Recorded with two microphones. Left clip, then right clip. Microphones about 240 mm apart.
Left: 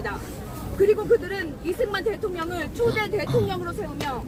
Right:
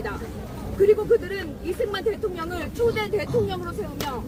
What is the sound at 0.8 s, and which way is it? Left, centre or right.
Speech, centre.